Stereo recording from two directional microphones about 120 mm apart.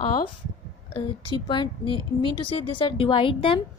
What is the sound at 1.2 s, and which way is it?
A woman's voice, 40° left (ahead or behind).